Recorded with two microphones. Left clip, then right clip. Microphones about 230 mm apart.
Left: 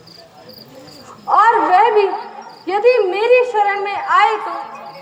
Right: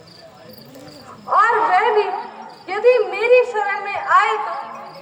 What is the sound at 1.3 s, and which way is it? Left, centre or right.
Dog, left.